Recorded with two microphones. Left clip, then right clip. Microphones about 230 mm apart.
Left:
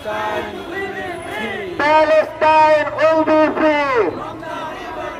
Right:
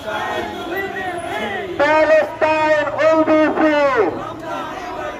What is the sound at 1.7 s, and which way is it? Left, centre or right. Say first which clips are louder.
A man's voice: even; left.